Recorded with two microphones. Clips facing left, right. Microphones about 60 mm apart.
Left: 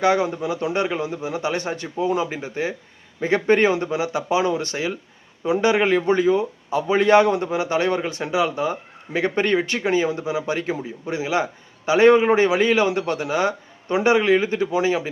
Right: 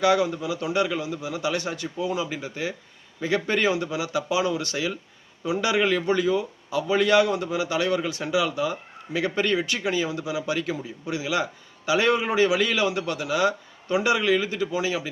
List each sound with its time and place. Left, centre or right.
0.0 s a man's voice: left